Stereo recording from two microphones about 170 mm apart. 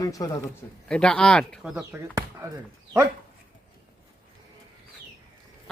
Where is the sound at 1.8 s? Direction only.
15° right (ahead or behind).